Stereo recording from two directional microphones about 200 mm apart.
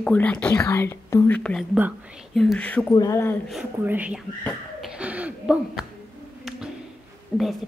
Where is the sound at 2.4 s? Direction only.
5° left (ahead or behind).